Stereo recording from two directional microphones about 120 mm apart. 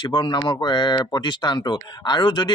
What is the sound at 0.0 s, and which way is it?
Speech, 40° left (ahead or behind).